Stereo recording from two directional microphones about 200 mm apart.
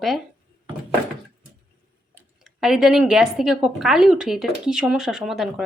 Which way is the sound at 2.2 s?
Centre (ahead or behind).